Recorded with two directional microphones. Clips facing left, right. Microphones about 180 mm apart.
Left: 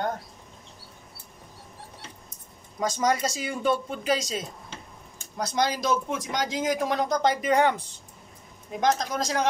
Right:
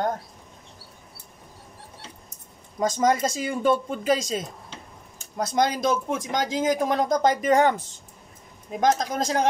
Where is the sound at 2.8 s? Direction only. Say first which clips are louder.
Right 3 dB; 50° right (ahead or behind).